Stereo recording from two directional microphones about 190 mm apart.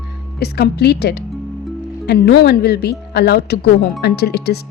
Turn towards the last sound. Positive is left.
turn(degrees=55)  # may be behind; listen again after turning